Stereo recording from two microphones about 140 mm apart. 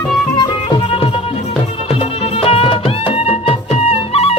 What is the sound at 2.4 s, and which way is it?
Music, 45° left (ahead or behind).